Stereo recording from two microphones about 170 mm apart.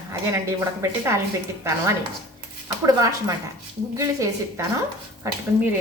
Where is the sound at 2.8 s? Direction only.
20° right (ahead or behind).